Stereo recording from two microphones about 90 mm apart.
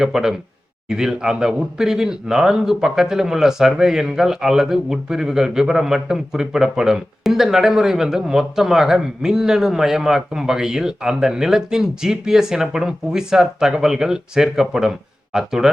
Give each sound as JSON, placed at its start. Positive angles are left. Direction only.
{"t": 0.0, "sound": "speech", "side_deg": -5}